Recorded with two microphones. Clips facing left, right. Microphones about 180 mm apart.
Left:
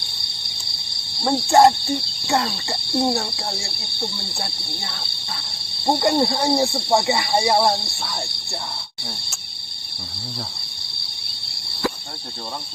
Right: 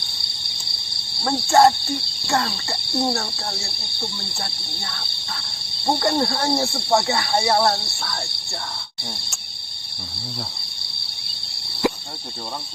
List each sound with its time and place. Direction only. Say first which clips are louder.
1.2 s speech: left 1 dB; 20° left (ahead or behind)
11.8 s cricket: right 3 dB; 20° right (ahead or behind)